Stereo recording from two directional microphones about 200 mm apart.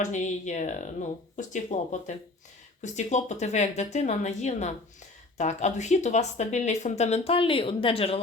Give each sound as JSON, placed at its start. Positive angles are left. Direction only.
{"t": 0.0, "sound": "speech", "side_deg": 35}